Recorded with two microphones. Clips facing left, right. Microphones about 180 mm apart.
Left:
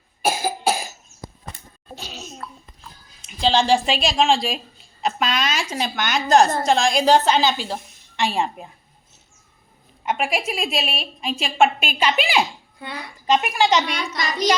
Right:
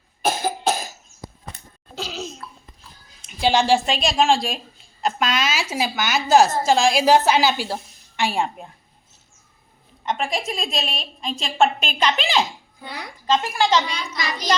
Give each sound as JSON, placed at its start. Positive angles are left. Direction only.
{"t": 0.2, "sound": "cough", "side_deg": 10}
{"t": 2.0, "sound": "laughter", "side_deg": -90}
{"t": 2.4, "sound": "babbling", "side_deg": 50}
{"t": 3.4, "sound": "speech", "side_deg": -10}
{"t": 3.8, "sound": "a woman's voice", "side_deg": 0}
{"t": 10.1, "sound": "a woman's voice", "side_deg": 10}
{"t": 13.9, "sound": "a child's voice", "side_deg": 65}